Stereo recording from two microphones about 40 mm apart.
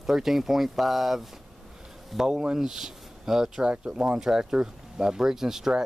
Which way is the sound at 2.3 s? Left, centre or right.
Centre.